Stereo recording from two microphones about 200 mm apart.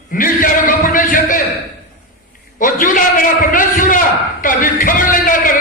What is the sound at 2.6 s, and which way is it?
A man's voice, 40° left (ahead or behind).